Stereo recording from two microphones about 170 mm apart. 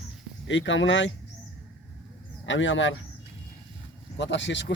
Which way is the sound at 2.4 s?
90° left.